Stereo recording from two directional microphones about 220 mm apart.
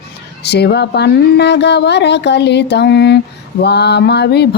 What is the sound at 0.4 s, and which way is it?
Mantra, 50° left (ahead or behind).